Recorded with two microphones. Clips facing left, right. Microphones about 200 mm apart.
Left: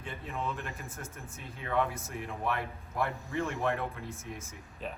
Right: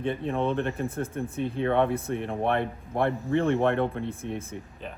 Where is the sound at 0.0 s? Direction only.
60° right (ahead or behind).